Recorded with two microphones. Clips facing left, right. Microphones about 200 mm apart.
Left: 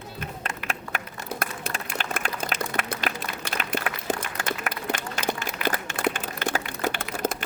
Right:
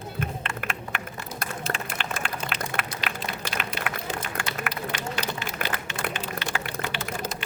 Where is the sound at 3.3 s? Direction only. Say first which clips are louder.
Left 2 dB; 50° left (ahead or behind).